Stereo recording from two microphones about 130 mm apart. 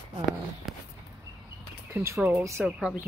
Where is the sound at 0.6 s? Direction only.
Centre (ahead or behind).